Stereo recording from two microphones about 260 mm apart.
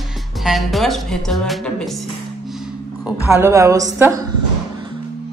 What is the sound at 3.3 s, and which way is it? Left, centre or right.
A woman's voice, centre.